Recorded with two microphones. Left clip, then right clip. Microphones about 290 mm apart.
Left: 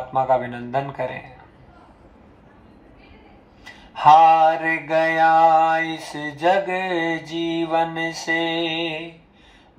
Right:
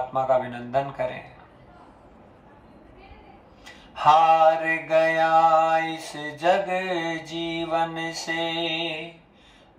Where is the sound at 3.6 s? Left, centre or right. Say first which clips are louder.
Left 5 dB; centre.